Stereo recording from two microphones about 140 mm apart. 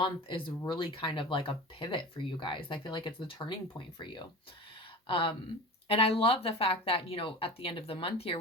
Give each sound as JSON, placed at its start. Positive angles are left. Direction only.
{"t": 0.0, "sound": "speech", "side_deg": 35}